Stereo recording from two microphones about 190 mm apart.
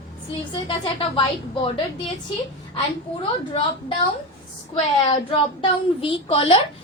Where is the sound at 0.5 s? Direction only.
25° left (ahead or behind).